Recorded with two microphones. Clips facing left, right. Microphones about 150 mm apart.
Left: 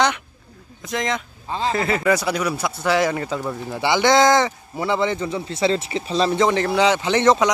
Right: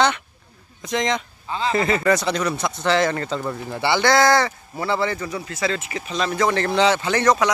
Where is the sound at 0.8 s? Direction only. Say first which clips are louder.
Right 2 dB; centre (ahead or behind).